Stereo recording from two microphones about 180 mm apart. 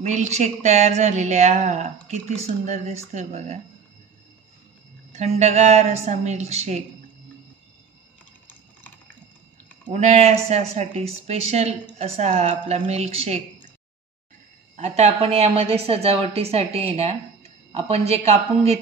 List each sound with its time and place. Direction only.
0.0 s a woman's voice: 40° right (ahead or behind)
5.1 s a woman's voice: 40° right (ahead or behind)
8.5 s typing: 10° left (ahead or behind)
9.8 s a woman's voice: 35° right (ahead or behind)
14.8 s a woman's voice: 40° right (ahead or behind)